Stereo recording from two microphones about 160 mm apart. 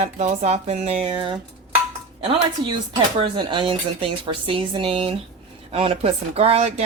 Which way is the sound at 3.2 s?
30° right (ahead or behind).